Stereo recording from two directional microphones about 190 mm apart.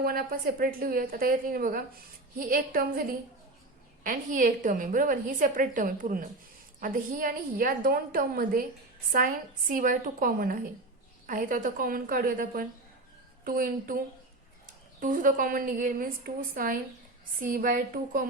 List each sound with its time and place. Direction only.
0.0 s a woman's voice: 50° right (ahead or behind)
15.0 s a woman's voice: 45° right (ahead or behind)